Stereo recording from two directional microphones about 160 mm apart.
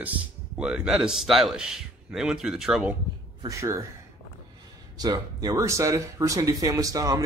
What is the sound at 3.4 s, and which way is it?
Speech, 20° right (ahead or behind).